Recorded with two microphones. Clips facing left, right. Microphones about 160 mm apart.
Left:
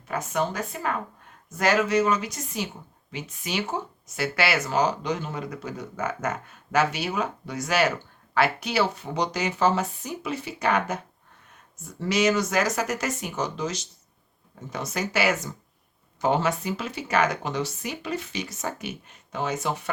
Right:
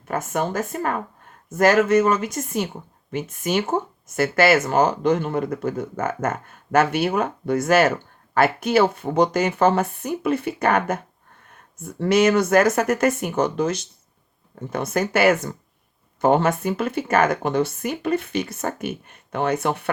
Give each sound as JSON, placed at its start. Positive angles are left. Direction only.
{"t": 0.1, "sound": "speech", "side_deg": -50}